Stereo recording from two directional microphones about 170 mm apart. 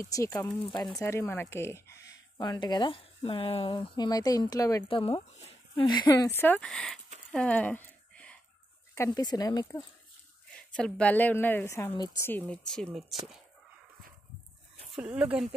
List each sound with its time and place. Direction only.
0.0 s speech: 20° left (ahead or behind)
1.0 s speech: 15° left (ahead or behind)
2.3 s speech: 25° left (ahead or behind)
4.8 s speech: 30° left (ahead or behind)
6.3 s speech: 10° left (ahead or behind)
7.3 s a sound: 10° left (ahead or behind)
8.9 s speech: 20° left (ahead or behind)
10.5 s a woman's voice: 5° left (ahead or behind)
15.0 s speech: 10° right (ahead or behind)